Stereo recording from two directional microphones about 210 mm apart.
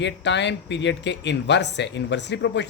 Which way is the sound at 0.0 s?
55° left (ahead or behind).